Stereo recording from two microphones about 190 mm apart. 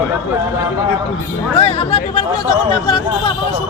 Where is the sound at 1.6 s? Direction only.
30° left (ahead or behind).